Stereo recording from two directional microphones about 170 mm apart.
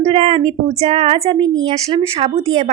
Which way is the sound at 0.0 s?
35° right (ahead or behind).